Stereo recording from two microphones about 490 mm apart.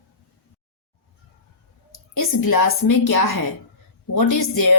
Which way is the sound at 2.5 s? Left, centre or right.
Left.